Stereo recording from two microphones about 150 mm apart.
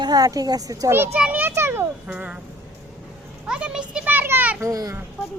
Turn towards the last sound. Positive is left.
turn(degrees=-25)  # may be behind; listen again after turning